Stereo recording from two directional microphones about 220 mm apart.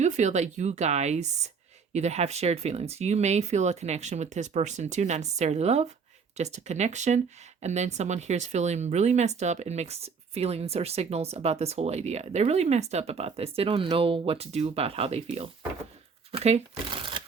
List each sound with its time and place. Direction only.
0.0 s speech: 35° right (ahead or behind)